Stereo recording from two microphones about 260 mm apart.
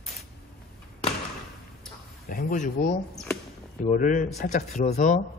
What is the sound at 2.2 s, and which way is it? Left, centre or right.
A man's voice, left.